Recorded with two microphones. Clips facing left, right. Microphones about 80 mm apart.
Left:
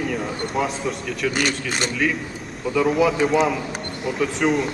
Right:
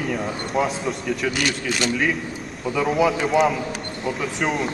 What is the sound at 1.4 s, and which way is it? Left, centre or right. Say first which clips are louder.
Speech: even; left.